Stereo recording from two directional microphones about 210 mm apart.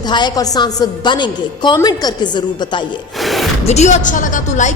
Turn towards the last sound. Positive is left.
turn(degrees=35)  # may be behind; listen again after turning